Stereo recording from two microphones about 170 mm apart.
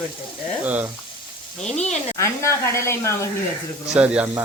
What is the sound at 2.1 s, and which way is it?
Speech, 15° left (ahead or behind).